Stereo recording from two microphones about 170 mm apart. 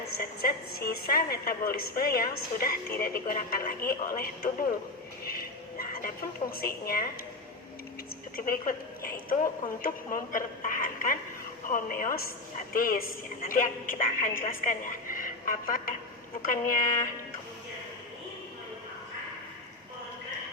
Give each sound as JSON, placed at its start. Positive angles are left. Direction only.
{"t": 0.2, "sound": "a woman's voice", "side_deg": 60}
{"t": 5.2, "sound": "a sound", "side_deg": 60}
{"t": 6.6, "sound": "a woman's voice", "side_deg": 60}
{"t": 8.4, "sound": "a woman's voice", "side_deg": 60}